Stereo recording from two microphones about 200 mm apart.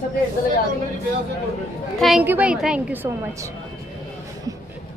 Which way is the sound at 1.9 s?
Centre (ahead or behind).